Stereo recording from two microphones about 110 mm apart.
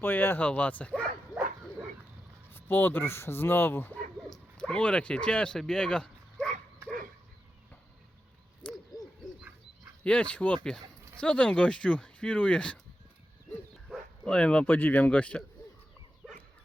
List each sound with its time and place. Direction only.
0.0 s speech: 20° left (ahead or behind)
2.5 s speech: 20° left (ahead or behind)
4.3 s speech: 10° left (ahead or behind)
8.6 s owl: 10° left (ahead or behind)
10.0 s speech: 10° left (ahead or behind)
13.9 s speech: 10° left (ahead or behind)
16.2 s dog: centre (ahead or behind)